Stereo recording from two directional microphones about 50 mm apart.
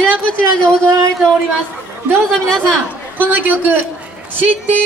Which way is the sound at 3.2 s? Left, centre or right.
Right.